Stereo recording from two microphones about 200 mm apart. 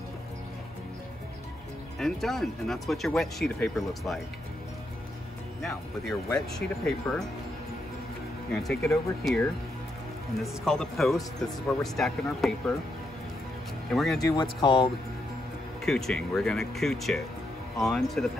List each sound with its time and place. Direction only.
2.0 s speech: centre (ahead or behind)
5.6 s speech: centre (ahead or behind)
8.6 s speech: centre (ahead or behind)
10.4 s speech: centre (ahead or behind)
13.8 s speech: centre (ahead or behind)
14.4 s speech: 25° left (ahead or behind)
15.8 s speech: centre (ahead or behind)